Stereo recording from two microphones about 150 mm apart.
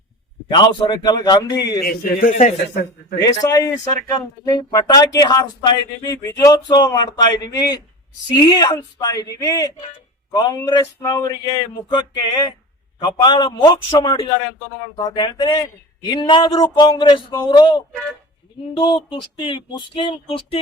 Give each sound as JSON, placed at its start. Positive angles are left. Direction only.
{"t": 0.5, "sound": "speech", "side_deg": 30}
{"t": 1.8, "sound": "a man's voice", "side_deg": 85}
{"t": 2.3, "sound": "a man's voice", "side_deg": 60}
{"t": 3.2, "sound": "speech", "side_deg": 20}